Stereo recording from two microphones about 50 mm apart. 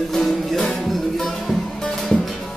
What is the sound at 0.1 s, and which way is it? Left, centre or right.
Music, centre.